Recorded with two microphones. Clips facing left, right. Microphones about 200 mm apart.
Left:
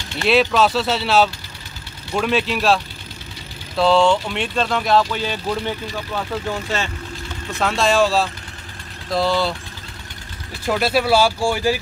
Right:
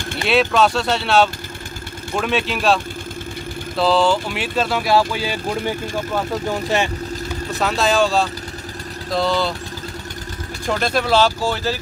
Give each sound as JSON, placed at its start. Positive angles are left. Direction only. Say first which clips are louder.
{"t": 0.2, "sound": "speech", "louder": "even", "side_deg": 0}
{"t": 7.5, "sound": "speech", "louder": "left 1 dB", "side_deg": 0}
{"t": 10.7, "sound": "speech", "louder": "left 1 dB", "side_deg": 5}